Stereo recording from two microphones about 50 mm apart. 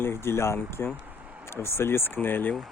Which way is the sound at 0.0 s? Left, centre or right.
Left.